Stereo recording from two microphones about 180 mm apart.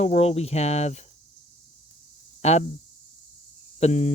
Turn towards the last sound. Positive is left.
turn(degrees=40)  # may be behind; listen again after turning